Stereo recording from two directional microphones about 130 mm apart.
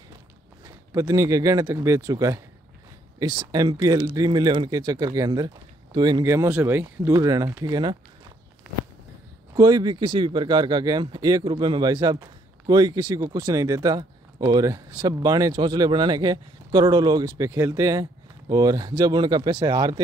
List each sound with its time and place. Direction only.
0.7 s speech: 25° right (ahead or behind)
6.2 s speech: 20° right (ahead or behind)
9.5 s speech: 30° right (ahead or behind)